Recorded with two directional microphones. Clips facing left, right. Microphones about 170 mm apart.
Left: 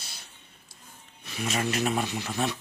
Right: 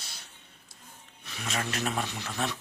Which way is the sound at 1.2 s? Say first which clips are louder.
Left 6 dB; 15° left (ahead or behind).